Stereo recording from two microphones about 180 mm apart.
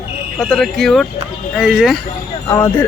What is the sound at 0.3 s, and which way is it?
Speech, 5° left (ahead or behind).